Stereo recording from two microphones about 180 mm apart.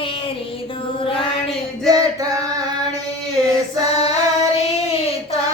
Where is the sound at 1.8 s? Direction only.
20° right (ahead or behind).